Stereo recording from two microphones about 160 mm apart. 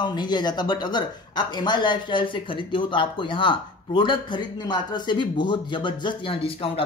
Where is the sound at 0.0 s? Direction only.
30° left (ahead or behind).